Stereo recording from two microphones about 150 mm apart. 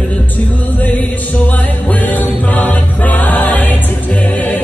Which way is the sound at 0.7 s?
10° left (ahead or behind).